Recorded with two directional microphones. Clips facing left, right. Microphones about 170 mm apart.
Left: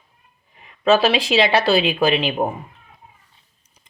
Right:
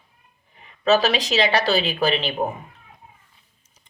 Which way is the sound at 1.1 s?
40° right (ahead or behind).